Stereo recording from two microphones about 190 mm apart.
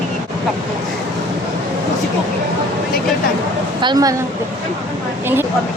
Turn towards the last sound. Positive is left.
turn(degrees=-20)  # may be behind; listen again after turning